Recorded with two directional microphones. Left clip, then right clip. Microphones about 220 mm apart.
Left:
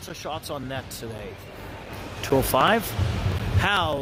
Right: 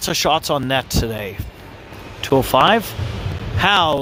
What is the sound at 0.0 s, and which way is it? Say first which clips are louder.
Speech: right 16 dB; 40° right (ahead or behind).